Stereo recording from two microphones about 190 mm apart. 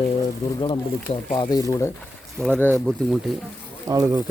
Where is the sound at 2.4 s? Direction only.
10° left (ahead or behind).